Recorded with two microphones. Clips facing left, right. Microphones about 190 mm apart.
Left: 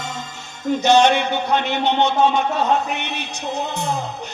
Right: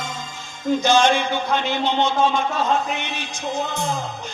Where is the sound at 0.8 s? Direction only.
65° left (ahead or behind).